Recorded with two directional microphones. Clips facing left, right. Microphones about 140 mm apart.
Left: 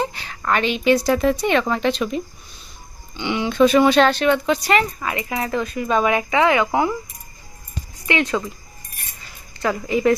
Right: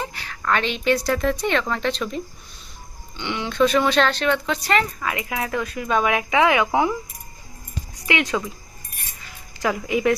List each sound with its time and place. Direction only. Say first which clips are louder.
0.0 s a sound: left 6 dB; 25° left (ahead or behind)
0.4 s speech: left 3 dB; 5° left (ahead or behind)
5.0 s speech: left 2 dB; centre (ahead or behind)
8.0 s speech: left 2 dB; centre (ahead or behind)
9.6 s speech: left 1 dB; 10° right (ahead or behind)